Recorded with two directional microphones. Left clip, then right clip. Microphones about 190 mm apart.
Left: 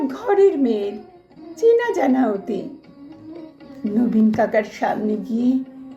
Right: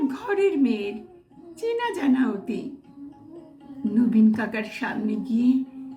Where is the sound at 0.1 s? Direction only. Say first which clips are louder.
Left 7 dB; centre (ahead or behind).